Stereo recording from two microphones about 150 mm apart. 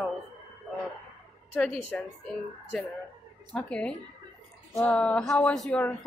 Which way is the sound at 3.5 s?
10° left (ahead or behind).